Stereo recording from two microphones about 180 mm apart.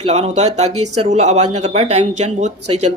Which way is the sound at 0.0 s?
35° right (ahead or behind).